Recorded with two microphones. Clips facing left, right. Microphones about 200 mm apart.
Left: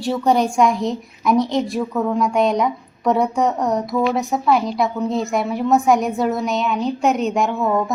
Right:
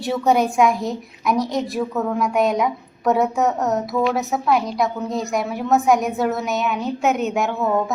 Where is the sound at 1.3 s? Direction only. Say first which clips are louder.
Left 5 dB; 20° left (ahead or behind).